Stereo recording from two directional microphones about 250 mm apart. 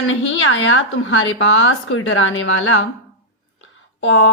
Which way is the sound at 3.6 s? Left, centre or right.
Left.